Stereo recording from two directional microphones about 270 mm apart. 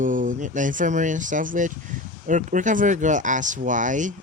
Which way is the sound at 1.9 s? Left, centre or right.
Right.